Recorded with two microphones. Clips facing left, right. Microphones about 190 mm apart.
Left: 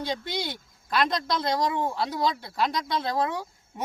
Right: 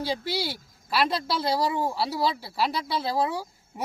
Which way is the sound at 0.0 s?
5° right (ahead or behind).